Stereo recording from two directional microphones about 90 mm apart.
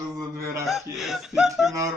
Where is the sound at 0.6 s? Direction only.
Centre (ahead or behind).